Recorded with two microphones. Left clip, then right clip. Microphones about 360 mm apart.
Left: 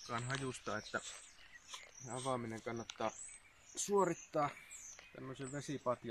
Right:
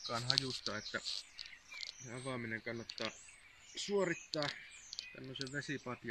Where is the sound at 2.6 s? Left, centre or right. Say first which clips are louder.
Left 1 dB; centre.